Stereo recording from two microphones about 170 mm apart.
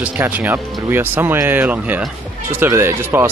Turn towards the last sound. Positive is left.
turn(degrees=-15)  # may be behind; listen again after turning